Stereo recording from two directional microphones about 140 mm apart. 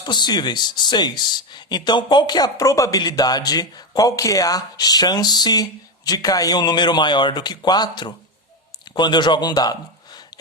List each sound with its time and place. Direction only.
0.0 s speech: 30° left (ahead or behind)